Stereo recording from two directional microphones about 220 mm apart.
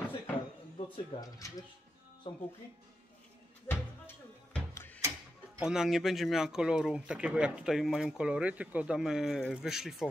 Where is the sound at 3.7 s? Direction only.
10° left (ahead or behind).